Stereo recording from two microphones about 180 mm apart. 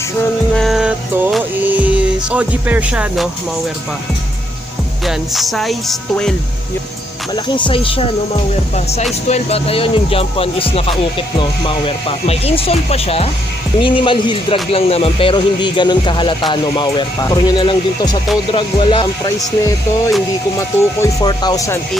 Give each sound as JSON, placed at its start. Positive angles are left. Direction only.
{"t": 0.5, "sound": "music", "side_deg": 0}
{"t": 5.0, "sound": "speech", "side_deg": 0}
{"t": 7.3, "sound": "speech", "side_deg": 25}